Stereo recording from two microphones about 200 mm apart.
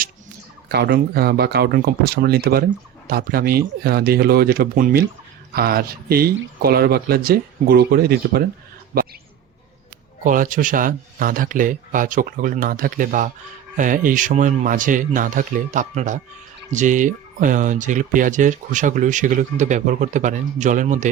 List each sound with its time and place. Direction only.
0.7 s speech: 50° right (ahead or behind)
8.9 s a sound: 50° right (ahead or behind)
10.2 s speech: 40° right (ahead or behind)